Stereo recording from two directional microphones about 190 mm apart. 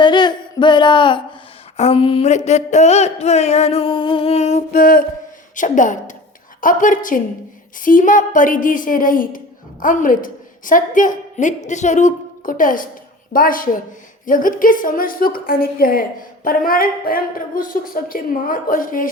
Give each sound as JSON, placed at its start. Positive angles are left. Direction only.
{"t": 0.0, "sound": "speech", "side_deg": 25}
{"t": 1.7, "sound": "a sound", "side_deg": 35}
{"t": 6.6, "sound": "a woman's voice", "side_deg": 45}